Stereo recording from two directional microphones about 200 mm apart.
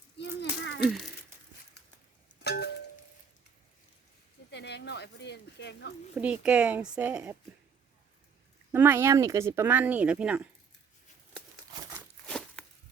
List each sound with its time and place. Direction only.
0.2 s a sound: 65° left (ahead or behind)
2.4 s a sound: 55° left (ahead or behind)
4.5 s speech: 55° left (ahead or behind)
6.1 s speech: 5° right (ahead or behind)
8.7 s speech: 10° right (ahead or behind)
12.3 s walk: 5° left (ahead or behind)